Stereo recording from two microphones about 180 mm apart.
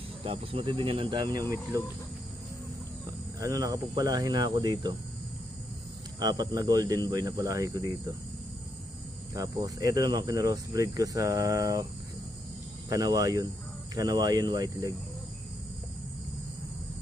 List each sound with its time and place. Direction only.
0.2 s speech: 30° right (ahead or behind)
3.3 s speech: 20° right (ahead or behind)
6.1 s speech: 20° right (ahead or behind)
9.3 s speech: 20° right (ahead or behind)
12.9 s speech: 20° right (ahead or behind)